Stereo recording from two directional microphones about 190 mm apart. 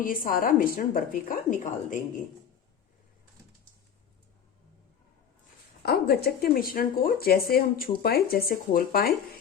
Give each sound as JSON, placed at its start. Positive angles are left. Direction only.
{"t": 0.0, "sound": "speech", "side_deg": 50}
{"t": 5.8, "sound": "speech", "side_deg": 55}